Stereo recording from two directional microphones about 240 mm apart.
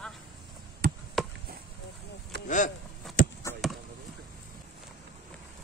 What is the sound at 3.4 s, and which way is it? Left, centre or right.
Basketball bounce, centre.